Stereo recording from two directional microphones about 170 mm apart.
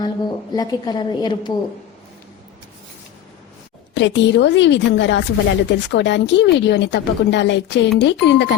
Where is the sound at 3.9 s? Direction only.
90° left.